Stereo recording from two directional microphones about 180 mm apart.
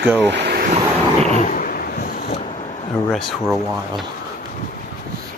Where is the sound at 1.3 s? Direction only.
45° left (ahead or behind).